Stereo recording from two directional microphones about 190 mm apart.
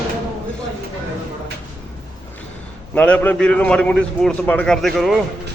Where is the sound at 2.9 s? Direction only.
5° left (ahead or behind).